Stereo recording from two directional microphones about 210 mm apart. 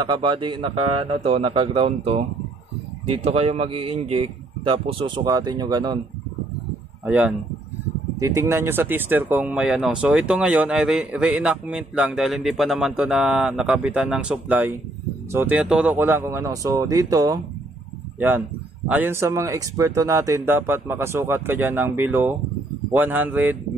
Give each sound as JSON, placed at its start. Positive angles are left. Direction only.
{"t": 0.0, "sound": "speech", "side_deg": -20}
{"t": 3.3, "sound": "speech", "side_deg": -30}
{"t": 7.1, "sound": "a man's voice", "side_deg": -5}